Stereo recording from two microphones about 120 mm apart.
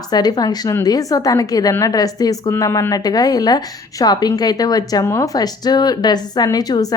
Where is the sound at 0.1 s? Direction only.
35° left (ahead or behind).